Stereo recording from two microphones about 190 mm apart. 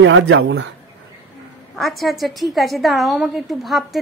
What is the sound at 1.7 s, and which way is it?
A woman's voice, centre (ahead or behind).